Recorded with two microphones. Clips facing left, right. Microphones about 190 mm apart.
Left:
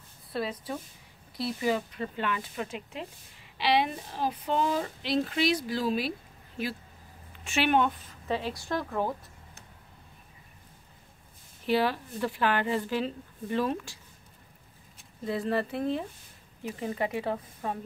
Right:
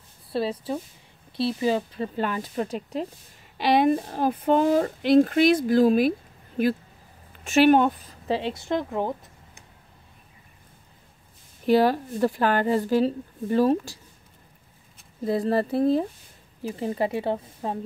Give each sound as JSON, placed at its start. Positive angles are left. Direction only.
{"t": 0.3, "sound": "a woman's voice", "side_deg": -30}
{"t": 7.4, "sound": "speech", "side_deg": -40}
{"t": 11.6, "sound": "a woman's voice", "side_deg": -45}
{"t": 15.2, "sound": "a woman's voice", "side_deg": -40}